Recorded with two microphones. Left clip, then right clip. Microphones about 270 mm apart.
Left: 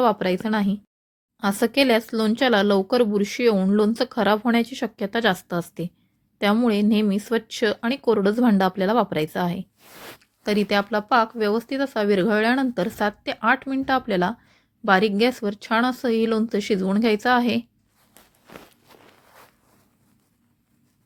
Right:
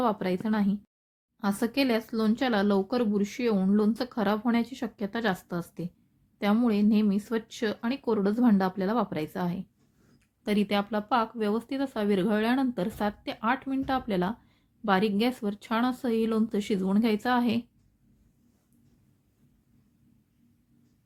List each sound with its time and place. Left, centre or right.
0.0 s speech: centre